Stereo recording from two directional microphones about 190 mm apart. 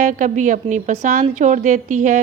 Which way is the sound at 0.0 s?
45° right (ahead or behind).